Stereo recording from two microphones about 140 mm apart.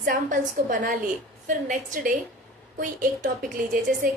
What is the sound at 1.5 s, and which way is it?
Speech, 70° right (ahead or behind).